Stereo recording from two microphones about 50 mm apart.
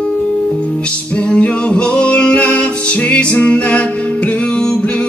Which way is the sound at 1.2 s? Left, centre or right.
Left.